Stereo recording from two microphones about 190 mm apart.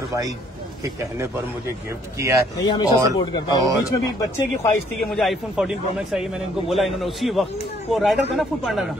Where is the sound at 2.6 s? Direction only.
25° left (ahead or behind).